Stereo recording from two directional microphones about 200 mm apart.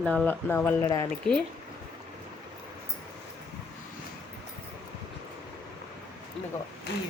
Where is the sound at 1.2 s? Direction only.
Centre (ahead or behind).